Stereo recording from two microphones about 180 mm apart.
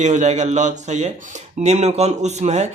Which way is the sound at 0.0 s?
40° right (ahead or behind).